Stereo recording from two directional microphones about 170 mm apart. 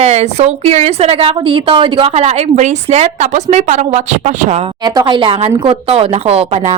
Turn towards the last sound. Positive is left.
turn(degrees=-35)  # may be behind; listen again after turning